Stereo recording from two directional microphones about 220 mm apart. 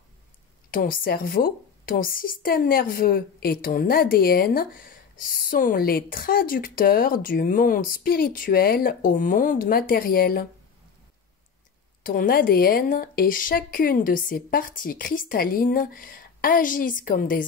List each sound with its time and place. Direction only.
0.7 s a woman's voice: 40° left (ahead or behind)
12.0 s a woman's voice: 40° left (ahead or behind)